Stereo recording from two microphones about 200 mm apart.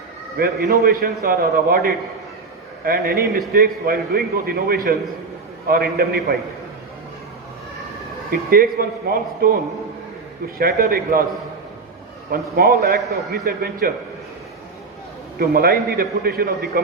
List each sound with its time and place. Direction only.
0.3 s a man's voice: 50° right (ahead or behind)
8.3 s a man's voice: 50° right (ahead or behind)
10.6 s a man's voice: 50° right (ahead or behind)
12.3 s a man's voice: 50° right (ahead or behind)
15.4 s a man's voice: 50° right (ahead or behind)